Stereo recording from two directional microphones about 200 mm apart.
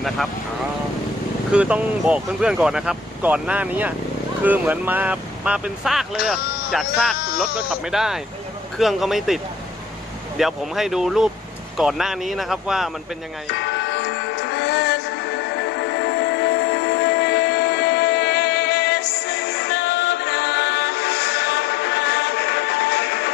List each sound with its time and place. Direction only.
1.5 s speech: 5° right (ahead or behind)
13.6 s music: 60° left (ahead or behind)